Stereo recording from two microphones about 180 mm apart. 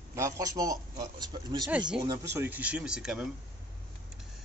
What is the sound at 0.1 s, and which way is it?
A man's voice, 20° right (ahead or behind).